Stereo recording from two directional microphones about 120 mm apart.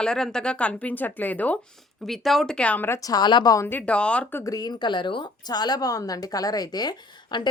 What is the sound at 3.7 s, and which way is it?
Speech, 10° left (ahead or behind).